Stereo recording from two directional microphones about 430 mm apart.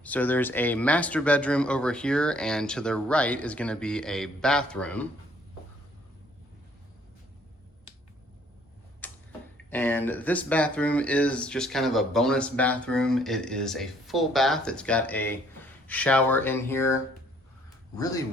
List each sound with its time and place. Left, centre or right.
0.0 s speech: centre
9.0 s tick-tock: centre
9.6 s speech: centre